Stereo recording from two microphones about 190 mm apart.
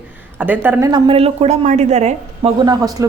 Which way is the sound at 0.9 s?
25° right (ahead or behind).